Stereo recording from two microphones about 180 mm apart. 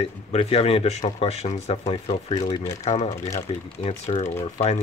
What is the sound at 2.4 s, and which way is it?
Speech, 20° left (ahead or behind).